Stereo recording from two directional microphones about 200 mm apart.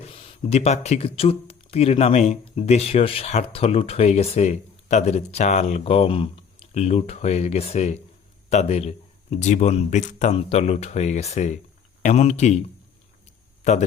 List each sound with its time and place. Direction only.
0.0 s speech: 30° left (ahead or behind)